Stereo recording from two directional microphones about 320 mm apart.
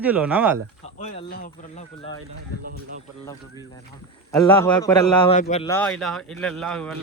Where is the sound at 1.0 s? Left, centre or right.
Centre.